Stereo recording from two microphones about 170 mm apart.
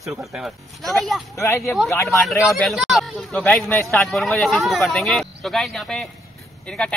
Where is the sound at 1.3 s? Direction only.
15° left (ahead or behind).